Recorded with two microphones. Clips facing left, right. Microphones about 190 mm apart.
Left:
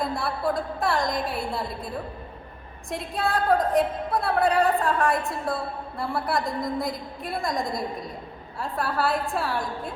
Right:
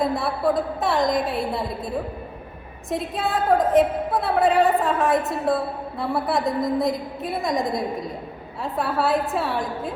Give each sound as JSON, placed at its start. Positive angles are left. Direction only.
{"t": 0.0, "sound": "a woman's voice", "side_deg": 0}
{"t": 5.1, "sound": "a woman's voice", "side_deg": -20}
{"t": 5.5, "sound": "a woman's voice", "side_deg": 0}
{"t": 8.6, "sound": "a woman's voice", "side_deg": 0}